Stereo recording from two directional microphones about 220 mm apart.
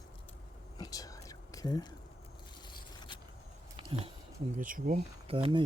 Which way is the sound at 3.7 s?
25° right (ahead or behind).